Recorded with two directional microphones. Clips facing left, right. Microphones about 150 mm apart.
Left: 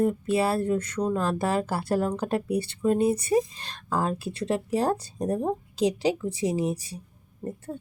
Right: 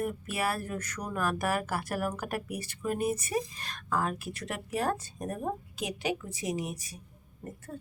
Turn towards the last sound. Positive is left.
turn(degrees=25)  # may be behind; listen again after turning